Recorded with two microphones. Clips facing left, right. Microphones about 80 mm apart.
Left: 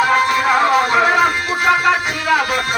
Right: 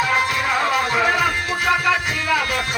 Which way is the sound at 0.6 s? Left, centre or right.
Left.